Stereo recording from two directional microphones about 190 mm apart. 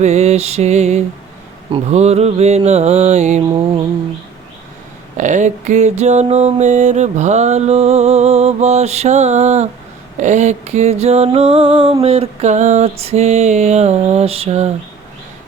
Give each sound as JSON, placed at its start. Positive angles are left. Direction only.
{"t": 0.0, "sound": "music", "side_deg": -35}
{"t": 5.1, "sound": "music", "side_deg": -40}